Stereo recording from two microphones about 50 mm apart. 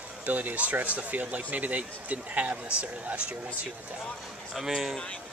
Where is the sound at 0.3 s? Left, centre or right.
Right.